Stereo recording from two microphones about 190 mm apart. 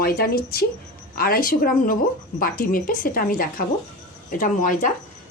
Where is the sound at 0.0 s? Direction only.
55° left (ahead or behind).